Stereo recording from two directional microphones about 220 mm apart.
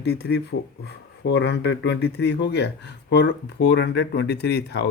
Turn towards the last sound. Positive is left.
turn(degrees=50)  # may be behind; listen again after turning